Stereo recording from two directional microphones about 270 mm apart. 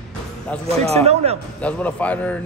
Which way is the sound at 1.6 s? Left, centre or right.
Centre.